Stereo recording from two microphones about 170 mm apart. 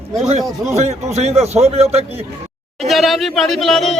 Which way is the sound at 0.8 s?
40° right (ahead or behind).